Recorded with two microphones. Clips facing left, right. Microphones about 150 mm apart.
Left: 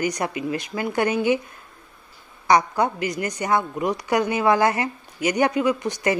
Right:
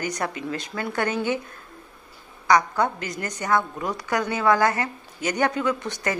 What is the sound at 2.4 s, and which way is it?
A woman's voice, 20° left (ahead or behind).